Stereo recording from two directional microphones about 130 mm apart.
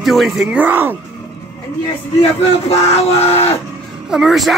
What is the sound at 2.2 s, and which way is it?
Speech, 50° left (ahead or behind).